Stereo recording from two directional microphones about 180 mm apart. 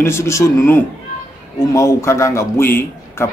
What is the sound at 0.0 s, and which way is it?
A man's voice, 15° left (ahead or behind).